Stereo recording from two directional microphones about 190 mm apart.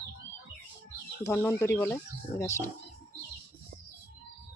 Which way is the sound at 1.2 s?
15° left (ahead or behind).